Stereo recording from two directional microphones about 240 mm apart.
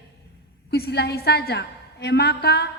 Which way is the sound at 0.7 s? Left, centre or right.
Left.